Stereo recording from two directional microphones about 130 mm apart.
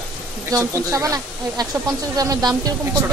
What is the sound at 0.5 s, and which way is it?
Speech, 20° right (ahead or behind).